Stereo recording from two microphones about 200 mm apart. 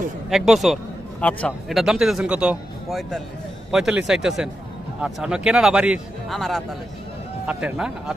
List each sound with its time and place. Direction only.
0.3 s a man's voice: centre (ahead or behind)